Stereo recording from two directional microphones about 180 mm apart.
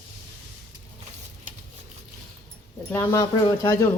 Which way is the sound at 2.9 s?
15° left (ahead or behind).